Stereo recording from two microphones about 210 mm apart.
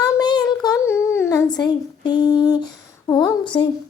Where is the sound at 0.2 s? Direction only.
20° left (ahead or behind).